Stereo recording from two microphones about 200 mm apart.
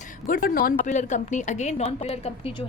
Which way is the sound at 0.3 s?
45° left (ahead or behind).